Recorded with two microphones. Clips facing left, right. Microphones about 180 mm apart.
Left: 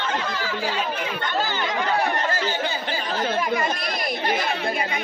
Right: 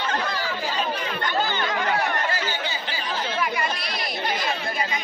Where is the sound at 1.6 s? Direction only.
25° left (ahead or behind).